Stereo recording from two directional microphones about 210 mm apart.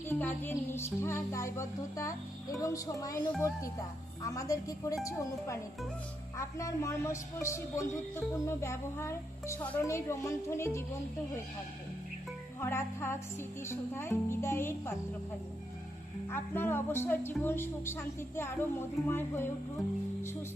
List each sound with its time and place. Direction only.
0.1 s a woman's voice: 10° left (ahead or behind)
12.5 s a woman's voice: 10° left (ahead or behind)
16.3 s a woman's voice: 10° left (ahead or behind)